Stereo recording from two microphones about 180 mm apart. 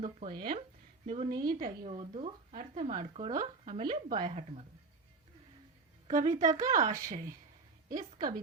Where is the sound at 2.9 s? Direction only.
25° right (ahead or behind).